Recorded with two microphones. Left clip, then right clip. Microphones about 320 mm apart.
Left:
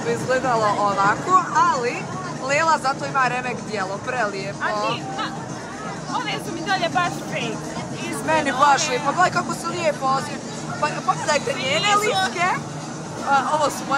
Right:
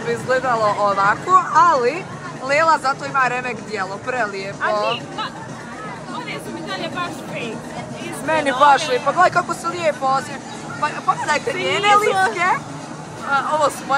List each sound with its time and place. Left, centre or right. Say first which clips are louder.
0.1 s speech: right 2 dB; centre
6.7 s speech: left 5 dB; centre